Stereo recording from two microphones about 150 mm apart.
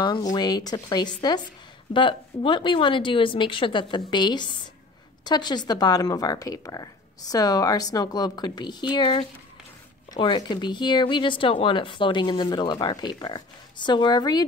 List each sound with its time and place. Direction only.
0.0 s speech: 30° left (ahead or behind)